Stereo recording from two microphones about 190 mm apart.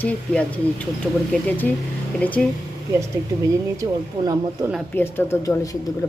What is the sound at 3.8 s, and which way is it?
Speech, 20° right (ahead or behind).